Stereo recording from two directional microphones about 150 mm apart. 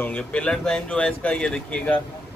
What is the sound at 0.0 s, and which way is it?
Speech, 10° left (ahead or behind).